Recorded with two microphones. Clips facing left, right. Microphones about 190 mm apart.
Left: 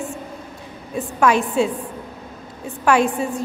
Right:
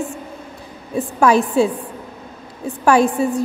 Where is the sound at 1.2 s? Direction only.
35° right (ahead or behind).